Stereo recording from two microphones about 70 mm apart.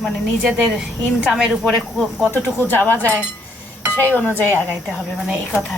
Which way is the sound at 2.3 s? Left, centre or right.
Left.